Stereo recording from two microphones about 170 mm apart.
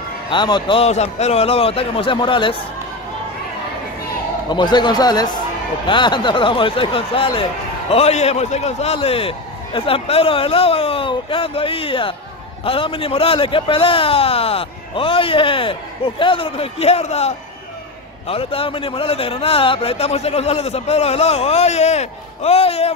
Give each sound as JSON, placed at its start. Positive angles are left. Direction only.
{"t": 0.3, "sound": "a man's voice", "side_deg": 25}
{"t": 4.5, "sound": "a man's voice", "side_deg": 25}
{"t": 18.3, "sound": "a man's voice", "side_deg": 35}